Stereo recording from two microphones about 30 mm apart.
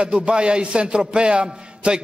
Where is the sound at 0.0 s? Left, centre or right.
Right.